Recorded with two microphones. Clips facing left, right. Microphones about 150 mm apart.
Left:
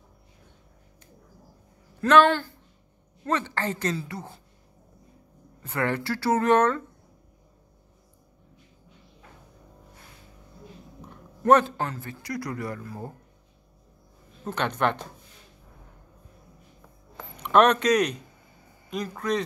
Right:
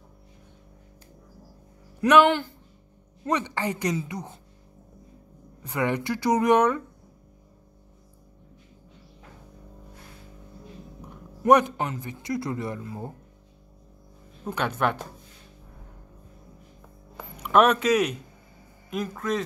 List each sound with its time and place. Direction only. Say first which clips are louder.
2.0 s speech: even; 15° right (ahead or behind)
5.6 s speech: right 1 dB; 15° right (ahead or behind)
11.0 s a man's voice: even; 15° right (ahead or behind)
14.4 s speech: even; 10° right (ahead or behind)
17.4 s speech: even; 5° right (ahead or behind)